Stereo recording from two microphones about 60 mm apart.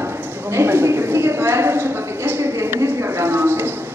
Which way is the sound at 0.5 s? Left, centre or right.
Right.